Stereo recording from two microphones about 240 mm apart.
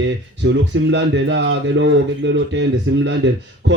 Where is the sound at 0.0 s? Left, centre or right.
Right.